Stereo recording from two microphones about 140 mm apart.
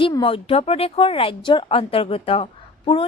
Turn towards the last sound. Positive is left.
turn(degrees=40)  # may be behind; listen again after turning